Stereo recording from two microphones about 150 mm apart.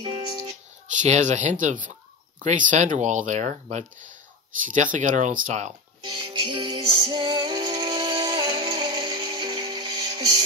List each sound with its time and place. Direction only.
0.0 s music: 30° right (ahead or behind)
1.0 s speech: 50° right (ahead or behind)
4.9 s speech: 55° right (ahead or behind)
6.0 s music: 30° right (ahead or behind)